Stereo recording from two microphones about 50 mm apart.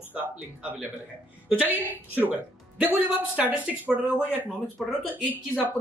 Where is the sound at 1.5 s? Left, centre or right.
Right.